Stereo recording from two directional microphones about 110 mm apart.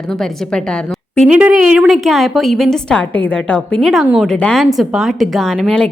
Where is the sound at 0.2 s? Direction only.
5° left (ahead or behind).